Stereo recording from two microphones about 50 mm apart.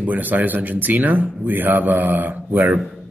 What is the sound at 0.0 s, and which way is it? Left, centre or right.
A man's voice, right.